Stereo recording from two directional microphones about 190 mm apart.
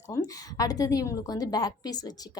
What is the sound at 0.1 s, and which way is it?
A woman's voice, 20° left (ahead or behind).